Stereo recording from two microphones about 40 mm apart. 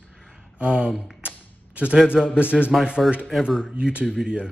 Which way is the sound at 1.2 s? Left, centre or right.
Right.